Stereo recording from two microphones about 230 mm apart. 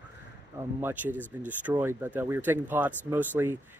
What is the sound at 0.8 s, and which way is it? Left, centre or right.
Speech, centre.